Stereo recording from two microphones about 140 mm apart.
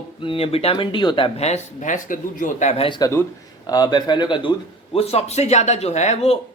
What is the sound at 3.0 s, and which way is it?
Speech, 25° left (ahead or behind).